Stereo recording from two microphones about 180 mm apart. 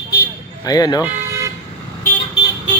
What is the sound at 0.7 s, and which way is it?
Speech, 20° left (ahead or behind).